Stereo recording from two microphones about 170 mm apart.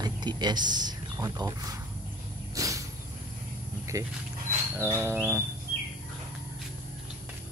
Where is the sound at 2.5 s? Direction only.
20° right (ahead or behind).